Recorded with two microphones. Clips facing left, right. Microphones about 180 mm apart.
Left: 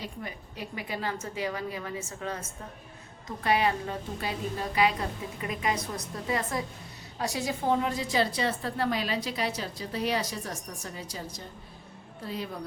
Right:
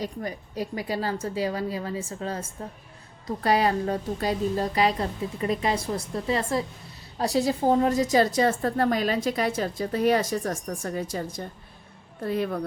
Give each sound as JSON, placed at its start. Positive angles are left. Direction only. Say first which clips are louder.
{"t": 0.0, "sound": "a woman's voice", "louder": "right 7 dB", "side_deg": -40}